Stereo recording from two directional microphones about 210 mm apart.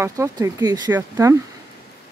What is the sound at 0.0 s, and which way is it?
Speech, 15° right (ahead or behind).